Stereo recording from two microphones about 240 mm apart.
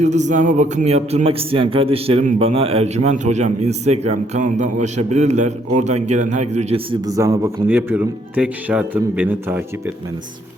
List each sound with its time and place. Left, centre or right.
0.0 s a man's voice: right; by 9.9 s centre